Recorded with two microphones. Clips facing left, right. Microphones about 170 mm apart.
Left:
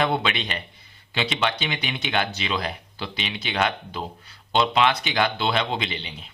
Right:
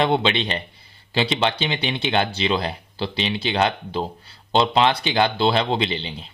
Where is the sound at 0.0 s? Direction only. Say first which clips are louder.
Right 4 dB; 25° right (ahead or behind).